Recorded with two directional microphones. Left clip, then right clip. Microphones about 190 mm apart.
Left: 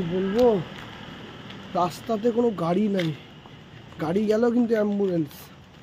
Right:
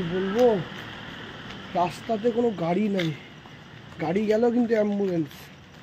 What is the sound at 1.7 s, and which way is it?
Speech, 20° left (ahead or behind).